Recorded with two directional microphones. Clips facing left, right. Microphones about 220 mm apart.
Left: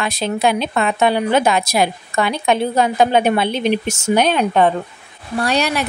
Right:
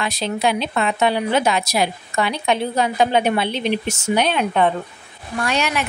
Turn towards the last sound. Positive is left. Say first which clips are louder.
# left 3 dB
turn(degrees=35)  # may be behind; listen again after turning